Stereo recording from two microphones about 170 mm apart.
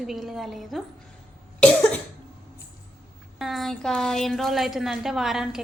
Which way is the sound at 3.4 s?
Centre (ahead or behind).